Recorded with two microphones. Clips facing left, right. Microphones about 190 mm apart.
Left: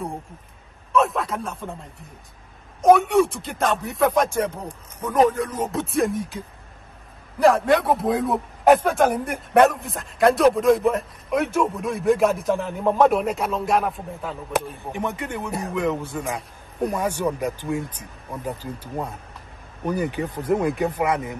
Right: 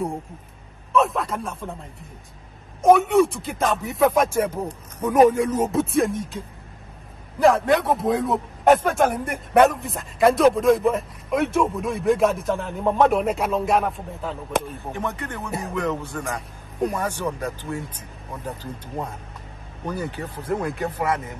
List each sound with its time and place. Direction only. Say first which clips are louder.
0.9 s a man's voice: even; centre (ahead or behind)
2.8 s a man's voice: even; centre (ahead or behind)
14.9 s speech: left 1 dB; 15° left (ahead or behind)